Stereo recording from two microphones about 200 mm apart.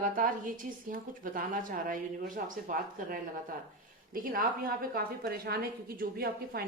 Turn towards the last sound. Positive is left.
turn(degrees=-50)  # may be behind; listen again after turning